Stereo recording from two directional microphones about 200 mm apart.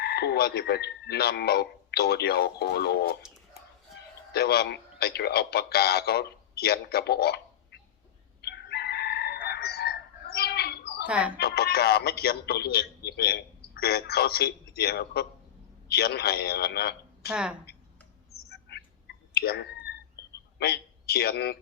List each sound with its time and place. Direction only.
0.0 s a man's voice: 55° left (ahead or behind)
4.3 s a man's voice: 55° left (ahead or behind)
8.4 s crowing: 55° left (ahead or behind)
11.0 s speech: 5° right (ahead or behind)
11.3 s a man's voice: 50° left (ahead or behind)
17.3 s a woman's voice: 5° right (ahead or behind)
18.3 s frog: 50° left (ahead or behind)
18.7 s a sound: 55° left (ahead or behind)
19.3 s clicking: 50° left (ahead or behind)
20.6 s a man's voice: 55° left (ahead or behind)